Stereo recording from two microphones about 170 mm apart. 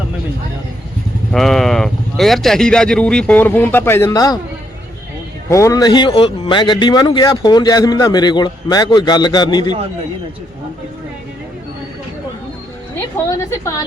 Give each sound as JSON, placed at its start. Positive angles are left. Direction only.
{"t": 1.3, "sound": "speech", "side_deg": 0}
{"t": 5.5, "sound": "speech", "side_deg": 20}
{"t": 13.2, "sound": "speech", "side_deg": 20}